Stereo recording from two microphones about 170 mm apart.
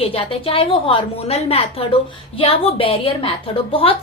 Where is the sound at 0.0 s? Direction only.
35° left (ahead or behind).